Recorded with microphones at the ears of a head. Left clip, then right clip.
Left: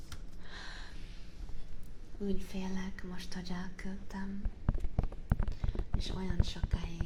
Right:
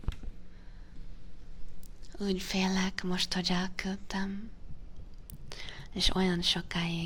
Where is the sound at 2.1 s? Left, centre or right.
Right.